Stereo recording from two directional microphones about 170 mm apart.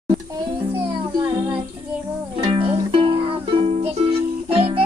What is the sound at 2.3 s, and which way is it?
Music, 30° right (ahead or behind).